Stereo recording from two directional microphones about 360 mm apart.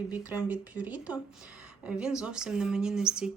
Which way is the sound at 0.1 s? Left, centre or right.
Centre.